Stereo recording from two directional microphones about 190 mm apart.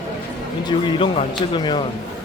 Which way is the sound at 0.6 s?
25° left (ahead or behind).